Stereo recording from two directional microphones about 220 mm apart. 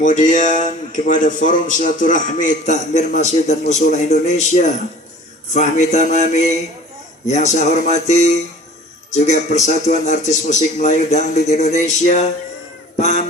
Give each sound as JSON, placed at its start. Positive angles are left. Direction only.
{"t": 0.0, "sound": "a man's voice", "side_deg": 35}